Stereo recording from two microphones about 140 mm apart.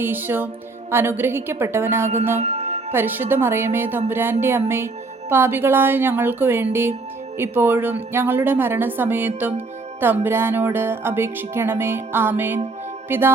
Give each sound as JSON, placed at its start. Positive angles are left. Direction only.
{"t": 0.0, "sound": "music", "side_deg": -15}
{"t": 2.4, "sound": "music", "side_deg": -50}
{"t": 2.9, "sound": "music", "side_deg": -15}